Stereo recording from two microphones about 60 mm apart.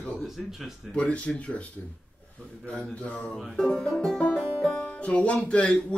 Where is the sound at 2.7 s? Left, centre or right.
Left.